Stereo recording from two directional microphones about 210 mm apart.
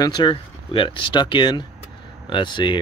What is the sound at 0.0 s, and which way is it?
Speech, 20° left (ahead or behind).